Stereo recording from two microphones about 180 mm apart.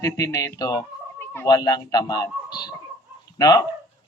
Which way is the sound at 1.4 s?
20° left (ahead or behind).